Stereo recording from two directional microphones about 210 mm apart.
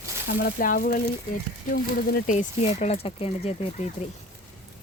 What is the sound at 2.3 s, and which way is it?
Speech, 30° left (ahead or behind).